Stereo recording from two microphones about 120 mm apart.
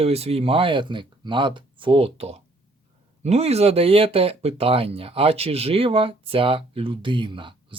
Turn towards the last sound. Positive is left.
turn(degrees=-45)  # may be behind; listen again after turning